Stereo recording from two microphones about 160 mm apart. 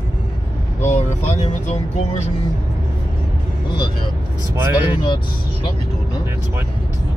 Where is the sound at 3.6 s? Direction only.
30° left (ahead or behind).